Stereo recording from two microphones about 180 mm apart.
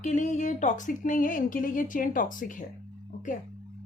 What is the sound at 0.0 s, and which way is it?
Speech, 40° left (ahead or behind).